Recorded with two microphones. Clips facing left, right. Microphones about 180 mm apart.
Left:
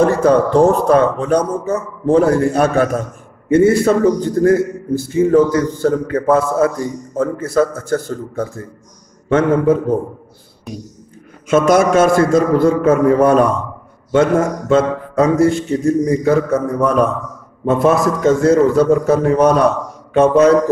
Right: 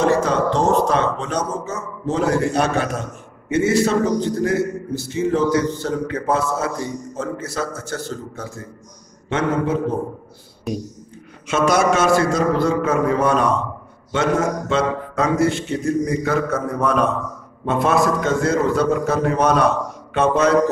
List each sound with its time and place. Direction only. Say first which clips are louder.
0.0 s a man's voice: left 5 dB; 55° left (ahead or behind)
11.4 s a man's voice: left 5 dB; 50° left (ahead or behind)
15.1 s a man's voice: left 6 dB; 35° left (ahead or behind)